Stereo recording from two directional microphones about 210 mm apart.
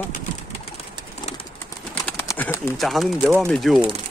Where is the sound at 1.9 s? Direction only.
10° left (ahead or behind).